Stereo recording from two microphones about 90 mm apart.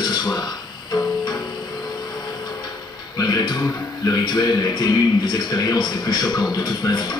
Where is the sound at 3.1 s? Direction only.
50° left (ahead or behind).